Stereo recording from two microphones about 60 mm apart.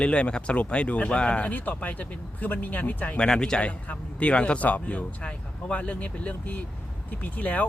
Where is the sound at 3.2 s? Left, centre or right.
Centre.